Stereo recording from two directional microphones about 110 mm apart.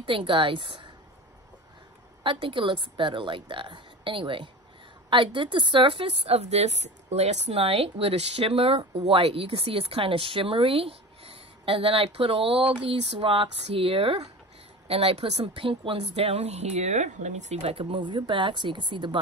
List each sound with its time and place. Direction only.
0.0 s speech: 50° right (ahead or behind)
2.2 s a woman's voice: 50° right (ahead or behind); by 17.7 s 90° right
17.7 s speech: 50° right (ahead or behind)